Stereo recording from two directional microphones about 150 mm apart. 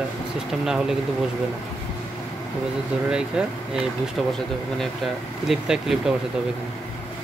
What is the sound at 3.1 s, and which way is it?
Speech, 5° right (ahead or behind).